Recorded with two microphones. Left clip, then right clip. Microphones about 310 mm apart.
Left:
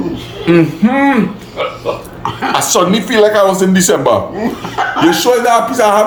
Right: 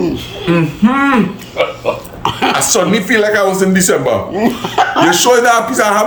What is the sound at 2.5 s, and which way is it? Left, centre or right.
Speech, centre.